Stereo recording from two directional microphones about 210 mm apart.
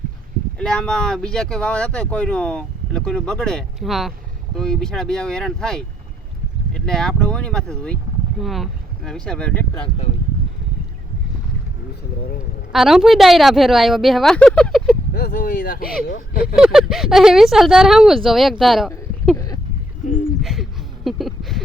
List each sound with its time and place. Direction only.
0.6 s speech: 5° left (ahead or behind)
9.7 s speech: 25° left (ahead or behind)
12.7 s speech: centre (ahead or behind)
15.1 s speech: 45° left (ahead or behind)
16.6 s speech: 5° right (ahead or behind)
18.6 s a sound: centre (ahead or behind)
20.4 s a sound: centre (ahead or behind)